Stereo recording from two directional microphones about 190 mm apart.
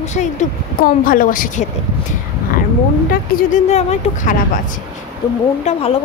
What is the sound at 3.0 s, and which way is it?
Speech, 40° left (ahead or behind).